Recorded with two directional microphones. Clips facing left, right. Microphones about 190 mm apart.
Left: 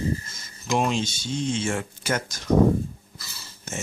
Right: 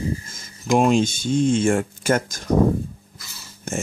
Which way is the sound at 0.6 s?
50° right (ahead or behind).